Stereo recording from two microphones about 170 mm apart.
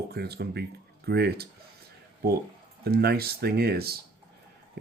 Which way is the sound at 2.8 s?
70° right (ahead or behind).